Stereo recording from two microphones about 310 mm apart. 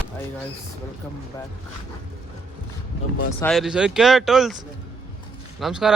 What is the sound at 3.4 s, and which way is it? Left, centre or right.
Speech, centre.